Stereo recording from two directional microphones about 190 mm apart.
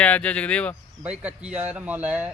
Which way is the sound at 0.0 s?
5° left (ahead or behind).